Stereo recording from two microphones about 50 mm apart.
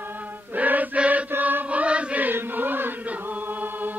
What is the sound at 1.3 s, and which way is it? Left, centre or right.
Chant, right.